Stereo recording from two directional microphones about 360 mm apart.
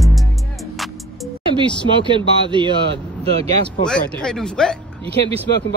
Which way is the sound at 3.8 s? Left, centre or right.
Centre.